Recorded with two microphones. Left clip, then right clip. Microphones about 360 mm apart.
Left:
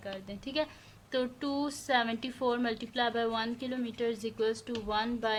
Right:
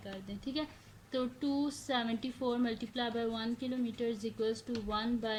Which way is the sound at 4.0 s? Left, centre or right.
Left.